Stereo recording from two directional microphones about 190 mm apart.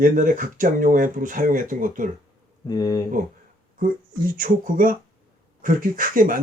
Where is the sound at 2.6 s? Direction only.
20° left (ahead or behind).